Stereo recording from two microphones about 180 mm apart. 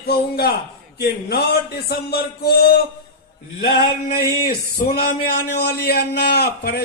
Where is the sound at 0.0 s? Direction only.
60° left (ahead or behind).